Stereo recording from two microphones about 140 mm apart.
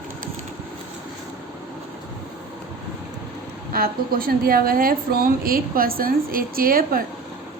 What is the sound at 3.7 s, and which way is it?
A woman's voice, 90° right.